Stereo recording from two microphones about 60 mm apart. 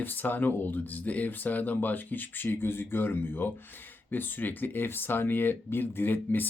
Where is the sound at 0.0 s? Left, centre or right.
Left.